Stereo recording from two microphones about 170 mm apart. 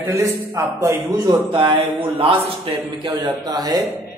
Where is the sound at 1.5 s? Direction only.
30° right (ahead or behind).